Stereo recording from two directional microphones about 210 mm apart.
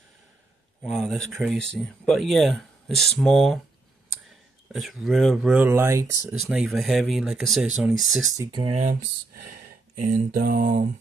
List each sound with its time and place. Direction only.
0.8 s speech: centre (ahead or behind)
4.7 s speech: centre (ahead or behind)
6.3 s speech: centre (ahead or behind)
8.4 s speech: 20° right (ahead or behind)
8.7 s mantra: 35° right (ahead or behind)